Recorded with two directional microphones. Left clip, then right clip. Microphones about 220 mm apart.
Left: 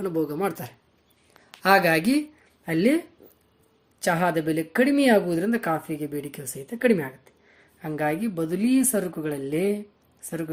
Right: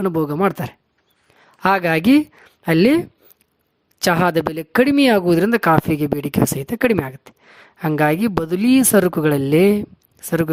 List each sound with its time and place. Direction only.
0.0 s speech: 45° right (ahead or behind)